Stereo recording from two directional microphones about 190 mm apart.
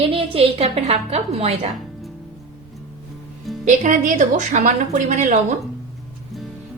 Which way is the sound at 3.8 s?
40° right (ahead or behind).